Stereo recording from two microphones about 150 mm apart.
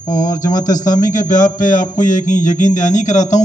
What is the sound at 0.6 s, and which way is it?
A man's voice, 60° left (ahead or behind).